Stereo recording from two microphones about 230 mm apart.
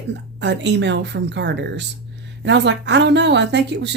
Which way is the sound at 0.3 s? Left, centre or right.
Right.